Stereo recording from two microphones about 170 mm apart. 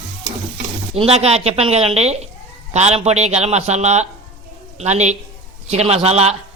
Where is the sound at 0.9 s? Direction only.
35° right (ahead or behind).